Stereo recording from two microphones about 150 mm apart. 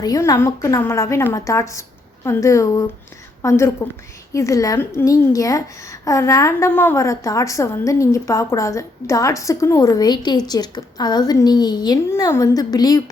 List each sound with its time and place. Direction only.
0.0 s a woman's voice: 25° left (ahead or behind)